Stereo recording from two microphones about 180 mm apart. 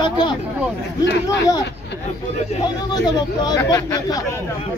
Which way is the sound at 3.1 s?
25° left (ahead or behind).